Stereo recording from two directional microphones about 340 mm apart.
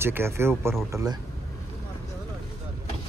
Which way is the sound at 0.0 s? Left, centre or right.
Centre.